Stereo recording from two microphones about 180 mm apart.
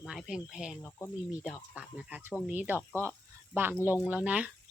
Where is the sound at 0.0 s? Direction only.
Centre (ahead or behind).